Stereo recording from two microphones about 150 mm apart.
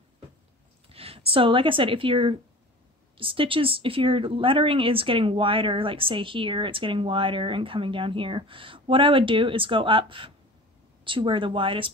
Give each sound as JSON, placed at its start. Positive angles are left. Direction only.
{"t": 0.8, "sound": "speech", "side_deg": -40}